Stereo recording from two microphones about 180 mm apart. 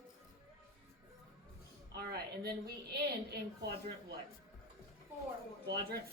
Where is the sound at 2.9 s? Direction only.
60° right (ahead or behind).